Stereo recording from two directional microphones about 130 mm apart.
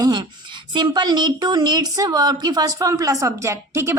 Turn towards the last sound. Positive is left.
turn(degrees=-20)  # may be behind; listen again after turning